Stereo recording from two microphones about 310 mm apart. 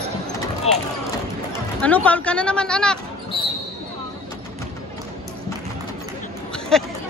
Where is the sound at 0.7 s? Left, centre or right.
Centre.